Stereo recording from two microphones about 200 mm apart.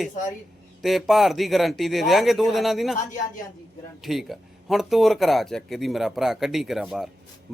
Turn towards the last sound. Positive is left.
turn(degrees=0)  # may be behind; listen again after turning